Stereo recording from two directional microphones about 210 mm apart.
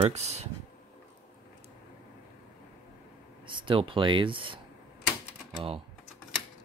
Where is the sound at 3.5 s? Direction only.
25° right (ahead or behind).